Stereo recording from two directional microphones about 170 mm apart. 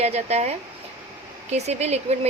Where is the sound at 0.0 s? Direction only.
40° right (ahead or behind).